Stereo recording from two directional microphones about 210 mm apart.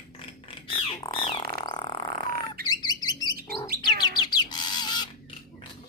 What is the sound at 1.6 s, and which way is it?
Chirp, 20° left (ahead or behind).